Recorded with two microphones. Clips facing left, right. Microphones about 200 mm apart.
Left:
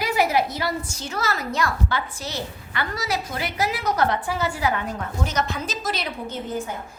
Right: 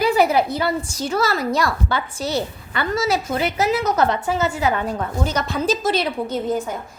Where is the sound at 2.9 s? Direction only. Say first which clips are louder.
Right 9 dB; 25° right (ahead or behind).